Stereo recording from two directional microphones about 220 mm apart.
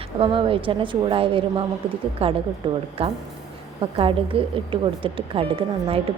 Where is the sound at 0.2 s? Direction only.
25° right (ahead or behind).